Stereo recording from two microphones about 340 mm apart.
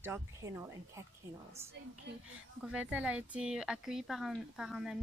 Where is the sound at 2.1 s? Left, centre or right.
Right.